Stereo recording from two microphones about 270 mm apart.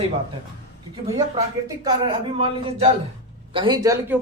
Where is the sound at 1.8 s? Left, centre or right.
Centre.